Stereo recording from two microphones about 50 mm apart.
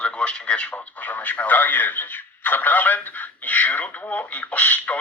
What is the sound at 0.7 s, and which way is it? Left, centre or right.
Speech, left.